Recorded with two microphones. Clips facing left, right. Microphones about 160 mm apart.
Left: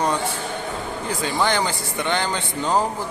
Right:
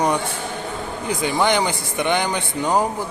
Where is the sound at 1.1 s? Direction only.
15° right (ahead or behind).